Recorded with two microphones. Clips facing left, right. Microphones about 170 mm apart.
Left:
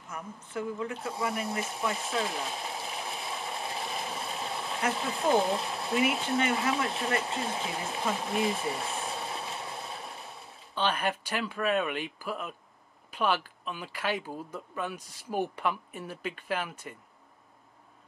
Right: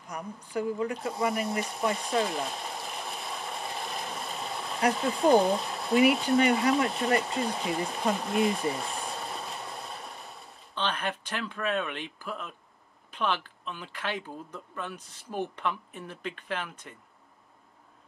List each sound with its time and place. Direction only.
0.0 s a sound: 15° right (ahead or behind)
0.4 s a woman's voice: 35° right (ahead or behind)
0.9 s speech: centre (ahead or behind)